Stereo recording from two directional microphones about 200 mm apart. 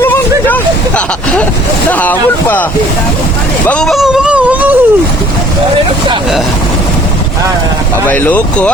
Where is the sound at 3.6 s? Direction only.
5° left (ahead or behind).